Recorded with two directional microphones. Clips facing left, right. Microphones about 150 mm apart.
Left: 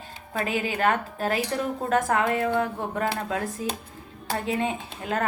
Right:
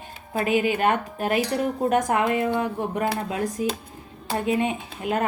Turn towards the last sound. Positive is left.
turn(degrees=-15)  # may be behind; listen again after turning